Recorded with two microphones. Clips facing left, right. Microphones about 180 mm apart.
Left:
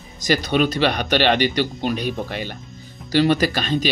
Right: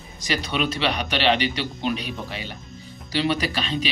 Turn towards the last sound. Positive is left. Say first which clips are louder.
# left 5 dB
turn(degrees=50)  # may be behind; listen again after turning